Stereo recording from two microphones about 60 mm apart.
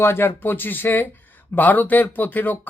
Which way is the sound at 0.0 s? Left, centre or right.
Left.